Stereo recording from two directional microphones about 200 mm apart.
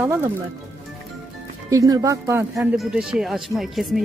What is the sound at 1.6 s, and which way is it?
Speech, 15° right (ahead or behind).